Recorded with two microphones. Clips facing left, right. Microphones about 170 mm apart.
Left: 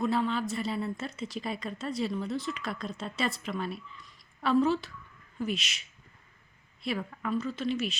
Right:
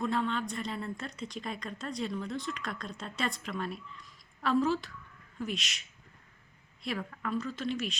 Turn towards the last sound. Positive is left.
turn(degrees=0)  # may be behind; listen again after turning